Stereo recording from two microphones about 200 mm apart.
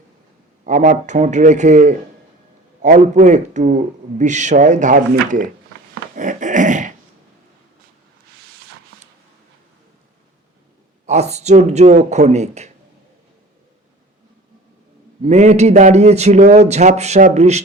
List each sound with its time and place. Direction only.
0.6 s a man's voice: 40° right (ahead or behind)
6.1 s dog: 40° right (ahead or behind)
11.0 s a man's voice: 35° right (ahead or behind)
15.2 s a man's voice: 35° right (ahead or behind)